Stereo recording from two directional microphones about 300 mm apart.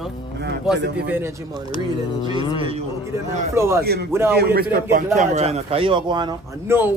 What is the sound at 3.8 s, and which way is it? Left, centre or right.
Speech, right.